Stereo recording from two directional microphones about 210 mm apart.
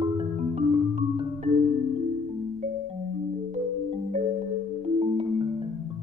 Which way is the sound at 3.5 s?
35° right (ahead or behind).